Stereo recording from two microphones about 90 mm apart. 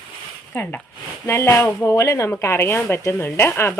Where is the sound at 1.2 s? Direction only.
30° left (ahead or behind).